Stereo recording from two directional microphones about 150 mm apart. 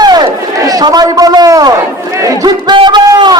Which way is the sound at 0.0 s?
25° right (ahead or behind).